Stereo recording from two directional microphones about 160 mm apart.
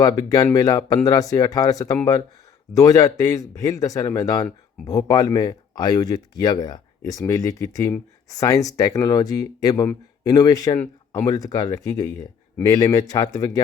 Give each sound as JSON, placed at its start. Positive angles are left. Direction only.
{"t": 0.0, "sound": "speech", "side_deg": 25}